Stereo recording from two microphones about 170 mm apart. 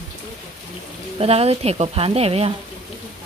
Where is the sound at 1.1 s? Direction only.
35° right (ahead or behind).